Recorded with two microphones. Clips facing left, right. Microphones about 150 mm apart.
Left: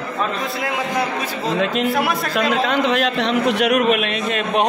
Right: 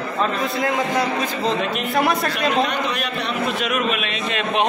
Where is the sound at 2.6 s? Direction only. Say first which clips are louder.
Left 5 dB; 90° left.